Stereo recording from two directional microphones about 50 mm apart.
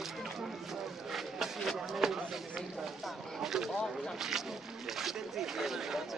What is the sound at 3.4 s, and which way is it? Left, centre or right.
Speech, centre.